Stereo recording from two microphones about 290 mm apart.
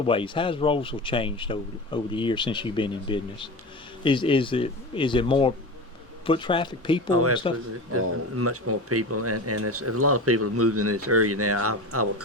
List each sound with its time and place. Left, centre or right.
0.0 s speech: centre
7.1 s speech: right